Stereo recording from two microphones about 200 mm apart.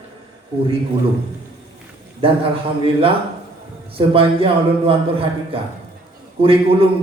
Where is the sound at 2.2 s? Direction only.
25° right (ahead or behind).